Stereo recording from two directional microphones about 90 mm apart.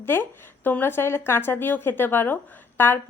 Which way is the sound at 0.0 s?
25° left (ahead or behind).